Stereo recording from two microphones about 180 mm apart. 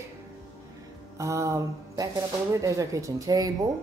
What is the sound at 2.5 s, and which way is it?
Speech, 20° right (ahead or behind).